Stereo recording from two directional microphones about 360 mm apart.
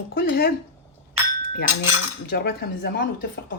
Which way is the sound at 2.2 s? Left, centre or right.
Left.